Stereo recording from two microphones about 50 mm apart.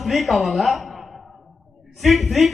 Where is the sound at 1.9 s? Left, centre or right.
Centre.